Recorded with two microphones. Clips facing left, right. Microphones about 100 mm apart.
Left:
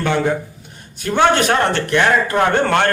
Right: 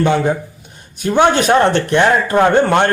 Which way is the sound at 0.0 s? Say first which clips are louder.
Right 3 dB; 20° right (ahead or behind).